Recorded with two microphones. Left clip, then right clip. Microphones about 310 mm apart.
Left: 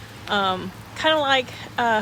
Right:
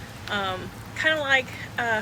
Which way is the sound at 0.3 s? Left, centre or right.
Centre.